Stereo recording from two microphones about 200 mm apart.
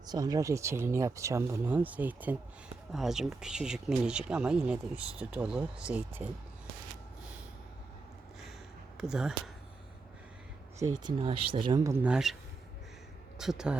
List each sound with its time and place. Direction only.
0.0 s speech: 20° right (ahead or behind)
9.0 s speech: 5° right (ahead or behind)
11.0 s speech: 25° right (ahead or behind); by 12.4 s 5° right (ahead or behind)
13.4 s speech: 5° right (ahead or behind)